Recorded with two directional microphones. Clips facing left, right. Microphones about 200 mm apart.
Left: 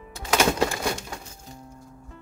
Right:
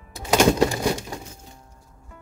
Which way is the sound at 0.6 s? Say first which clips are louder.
Right 4 dB; 15° right (ahead or behind).